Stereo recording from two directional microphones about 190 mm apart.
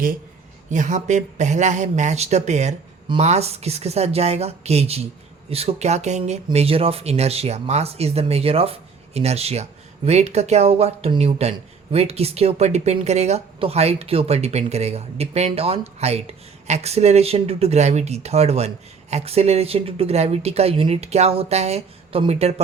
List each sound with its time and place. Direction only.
0.7 s speech: 40° right (ahead or behind)